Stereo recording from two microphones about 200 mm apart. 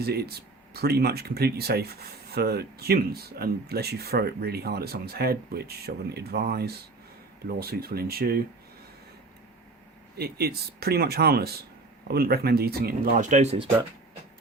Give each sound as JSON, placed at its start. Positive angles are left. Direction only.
{"t": 0.0, "sound": "speech", "side_deg": -50}
{"t": 10.2, "sound": "speech", "side_deg": -50}